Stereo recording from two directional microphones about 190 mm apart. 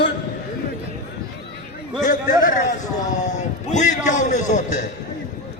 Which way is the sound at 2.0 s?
45° left (ahead or behind).